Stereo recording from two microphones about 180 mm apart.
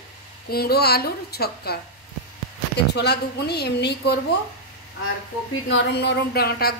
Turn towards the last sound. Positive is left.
turn(degrees=60)  # may be behind; listen again after turning